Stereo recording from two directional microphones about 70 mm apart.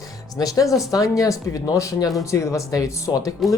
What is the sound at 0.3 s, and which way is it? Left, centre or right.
Speech, left.